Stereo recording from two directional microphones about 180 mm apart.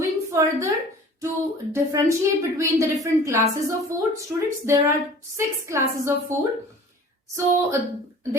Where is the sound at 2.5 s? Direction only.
15° right (ahead or behind).